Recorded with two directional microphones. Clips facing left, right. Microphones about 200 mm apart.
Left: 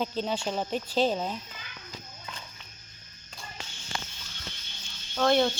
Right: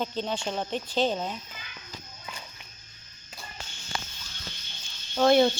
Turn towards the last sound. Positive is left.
turn(degrees=-10)  # may be behind; listen again after turning